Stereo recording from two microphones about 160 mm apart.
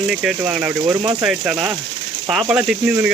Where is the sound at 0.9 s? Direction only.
25° right (ahead or behind).